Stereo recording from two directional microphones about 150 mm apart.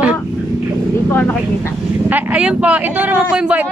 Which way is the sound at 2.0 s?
10° right (ahead or behind).